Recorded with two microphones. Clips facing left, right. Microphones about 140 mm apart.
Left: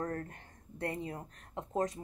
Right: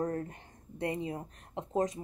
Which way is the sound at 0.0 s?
20° right (ahead or behind).